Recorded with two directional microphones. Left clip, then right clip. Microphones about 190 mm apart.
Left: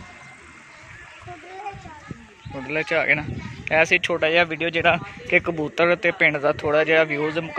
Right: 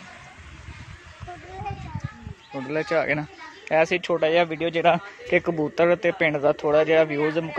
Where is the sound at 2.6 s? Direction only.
15° right (ahead or behind).